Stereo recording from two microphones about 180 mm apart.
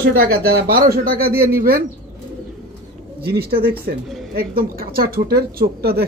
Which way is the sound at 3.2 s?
60° right (ahead or behind).